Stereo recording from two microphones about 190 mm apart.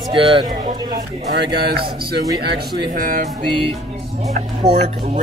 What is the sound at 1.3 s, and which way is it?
Speech, 60° right (ahead or behind).